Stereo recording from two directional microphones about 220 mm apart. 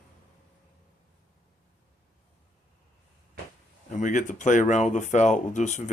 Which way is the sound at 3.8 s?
35° left (ahead or behind).